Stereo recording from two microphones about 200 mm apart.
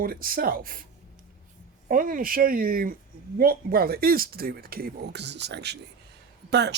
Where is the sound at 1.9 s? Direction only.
45° right (ahead or behind).